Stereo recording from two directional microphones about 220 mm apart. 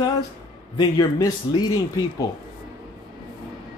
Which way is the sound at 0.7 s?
20° left (ahead or behind).